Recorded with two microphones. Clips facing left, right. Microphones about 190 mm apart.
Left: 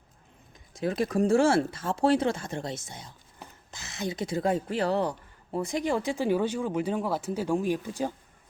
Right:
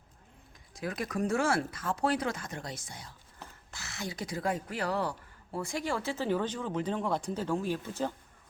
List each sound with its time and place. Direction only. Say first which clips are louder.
0.7 s speech: left 8 dB; 25° left (ahead or behind)